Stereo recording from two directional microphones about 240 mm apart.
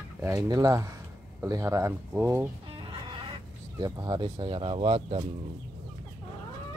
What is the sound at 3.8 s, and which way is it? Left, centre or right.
Speech, centre.